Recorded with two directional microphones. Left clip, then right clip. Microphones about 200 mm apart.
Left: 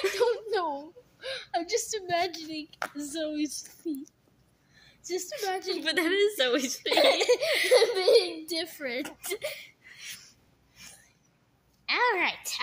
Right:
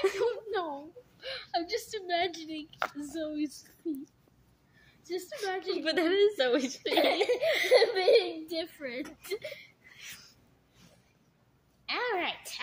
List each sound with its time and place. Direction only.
0.2 s a sound: 40° left (ahead or behind)
5.4 s a woman's voice: 40° left (ahead or behind)
5.8 s a woman's voice: 5° right (ahead or behind)
6.9 s a woman's voice: 40° left (ahead or behind)
7.7 s speech: 25° left (ahead or behind); by 9.7 s 50° left (ahead or behind)
9.9 s a sound: 5° right (ahead or behind)
11.8 s a woman's voice: 45° left (ahead or behind)